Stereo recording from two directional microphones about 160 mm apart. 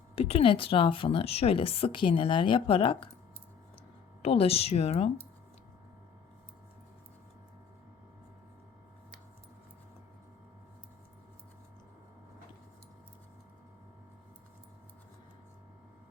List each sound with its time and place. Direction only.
0.2 s a woman's voice: 40° left (ahead or behind)
4.2 s a woman's voice: 40° left (ahead or behind)